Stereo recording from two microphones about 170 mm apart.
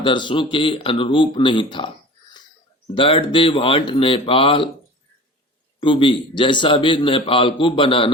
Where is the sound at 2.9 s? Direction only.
30° left (ahead or behind).